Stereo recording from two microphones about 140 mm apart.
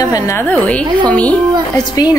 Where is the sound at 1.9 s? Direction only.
30° left (ahead or behind).